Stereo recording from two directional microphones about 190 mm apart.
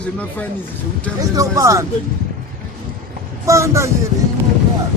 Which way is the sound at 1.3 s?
15° right (ahead or behind).